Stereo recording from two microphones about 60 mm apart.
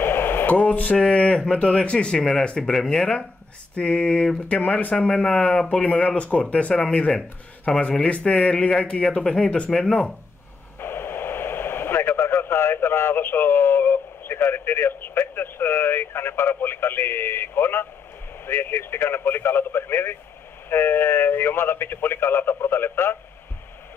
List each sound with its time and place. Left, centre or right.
0.0 s radio: left
0.6 s speech: left
10.8 s speech: left